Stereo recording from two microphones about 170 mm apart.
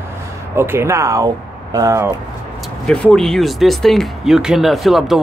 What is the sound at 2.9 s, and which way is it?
Speech, 5° left (ahead or behind).